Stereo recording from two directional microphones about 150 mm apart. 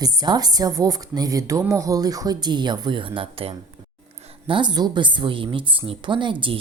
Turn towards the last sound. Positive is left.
turn(degrees=-35)  # may be behind; listen again after turning